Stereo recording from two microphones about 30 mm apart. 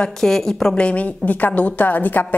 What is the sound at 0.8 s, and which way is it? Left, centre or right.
Speech, left.